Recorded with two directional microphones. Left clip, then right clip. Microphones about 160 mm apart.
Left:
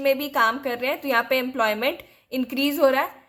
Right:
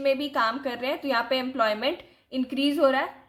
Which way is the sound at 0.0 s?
35° left (ahead or behind).